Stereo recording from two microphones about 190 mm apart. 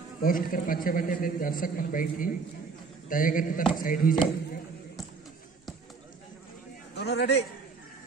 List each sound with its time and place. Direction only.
0.2 s a man's voice: 50° left (ahead or behind)
7.0 s a man's voice: 60° left (ahead or behind)